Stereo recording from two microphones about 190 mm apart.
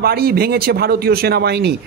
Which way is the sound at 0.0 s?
55° right (ahead or behind).